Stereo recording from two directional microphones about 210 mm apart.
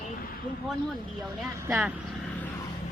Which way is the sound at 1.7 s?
Centre (ahead or behind).